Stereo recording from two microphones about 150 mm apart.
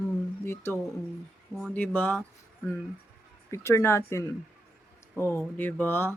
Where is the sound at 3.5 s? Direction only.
20° left (ahead or behind).